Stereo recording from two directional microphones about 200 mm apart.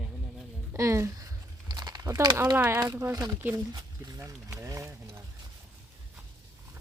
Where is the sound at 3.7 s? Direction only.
20° right (ahead or behind).